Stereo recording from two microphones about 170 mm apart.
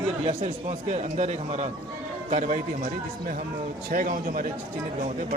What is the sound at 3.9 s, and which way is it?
Speech, 55° right (ahead or behind).